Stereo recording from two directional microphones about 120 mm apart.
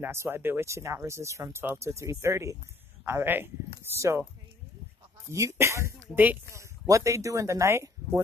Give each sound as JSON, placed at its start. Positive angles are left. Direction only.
{"t": 0.0, "sound": "speech", "side_deg": -20}
{"t": 5.3, "sound": "speech", "side_deg": -25}